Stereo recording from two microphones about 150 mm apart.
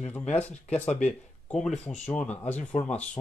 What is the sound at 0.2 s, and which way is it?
Speech, 45° left (ahead or behind).